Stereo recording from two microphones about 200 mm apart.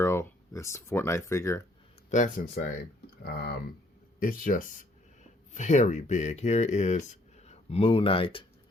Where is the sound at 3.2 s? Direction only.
50° left (ahead or behind).